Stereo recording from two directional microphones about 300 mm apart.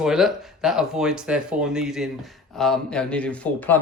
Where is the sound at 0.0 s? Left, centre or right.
Centre.